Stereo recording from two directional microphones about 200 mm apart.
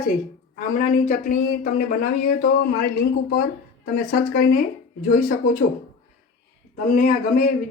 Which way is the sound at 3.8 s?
45° left (ahead or behind).